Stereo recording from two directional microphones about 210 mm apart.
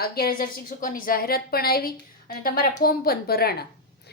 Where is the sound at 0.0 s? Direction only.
45° left (ahead or behind).